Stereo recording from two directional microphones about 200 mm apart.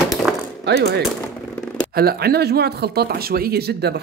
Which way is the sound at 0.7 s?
55° right (ahead or behind).